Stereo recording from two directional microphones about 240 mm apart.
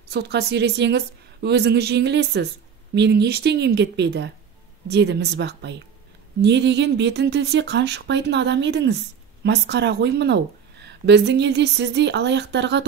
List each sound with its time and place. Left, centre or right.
0.1 s speech: right